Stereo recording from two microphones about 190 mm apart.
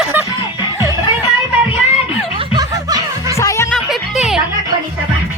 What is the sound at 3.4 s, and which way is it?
Music, 15° left (ahead or behind).